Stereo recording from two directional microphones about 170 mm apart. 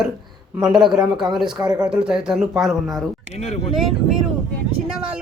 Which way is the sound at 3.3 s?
40° left (ahead or behind).